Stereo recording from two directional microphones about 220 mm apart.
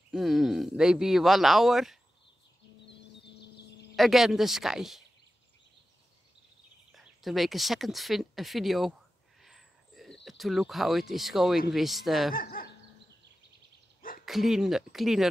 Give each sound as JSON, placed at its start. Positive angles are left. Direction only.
{"t": 0.1, "sound": "speech", "side_deg": 0}
{"t": 3.9, "sound": "speech", "side_deg": 0}
{"t": 6.9, "sound": "speech", "side_deg": 0}
{"t": 9.4, "sound": "a sound", "side_deg": 0}
{"t": 11.7, "sound": "speech", "side_deg": 0}
{"t": 12.3, "sound": "speech", "side_deg": 40}
{"t": 14.2, "sound": "speech", "side_deg": 0}